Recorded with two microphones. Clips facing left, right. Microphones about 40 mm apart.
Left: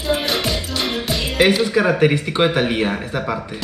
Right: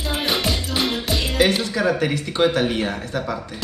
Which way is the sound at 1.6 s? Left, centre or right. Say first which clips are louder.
Left 5 dB; left.